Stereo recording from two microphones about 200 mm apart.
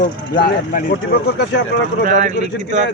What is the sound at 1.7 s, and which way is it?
Speech, 60° left (ahead or behind).